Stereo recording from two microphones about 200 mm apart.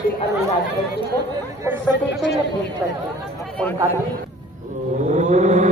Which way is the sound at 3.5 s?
10° left (ahead or behind).